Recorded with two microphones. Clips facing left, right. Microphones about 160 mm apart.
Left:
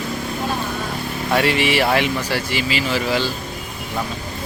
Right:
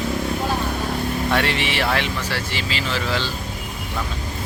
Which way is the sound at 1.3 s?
10° left (ahead or behind).